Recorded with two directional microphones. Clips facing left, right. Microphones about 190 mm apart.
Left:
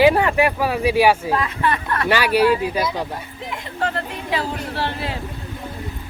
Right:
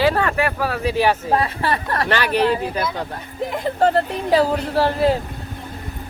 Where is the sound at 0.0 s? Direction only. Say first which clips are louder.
Left 3 dB; 15° left (ahead or behind).